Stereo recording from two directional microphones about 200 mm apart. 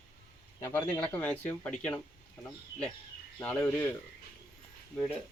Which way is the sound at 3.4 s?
10° left (ahead or behind).